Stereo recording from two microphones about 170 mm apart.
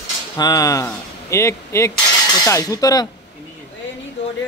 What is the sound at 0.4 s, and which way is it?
Speech, 20° left (ahead or behind).